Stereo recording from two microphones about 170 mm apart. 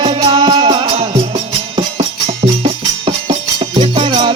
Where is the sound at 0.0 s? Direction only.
25° right (ahead or behind).